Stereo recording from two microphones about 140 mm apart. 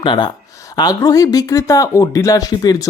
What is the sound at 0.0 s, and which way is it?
Speech, 35° left (ahead or behind).